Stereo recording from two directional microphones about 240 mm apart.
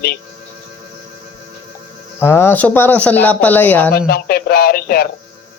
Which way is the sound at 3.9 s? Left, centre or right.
Left.